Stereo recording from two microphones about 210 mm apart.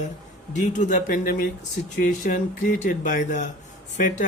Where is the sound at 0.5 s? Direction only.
35° left (ahead or behind).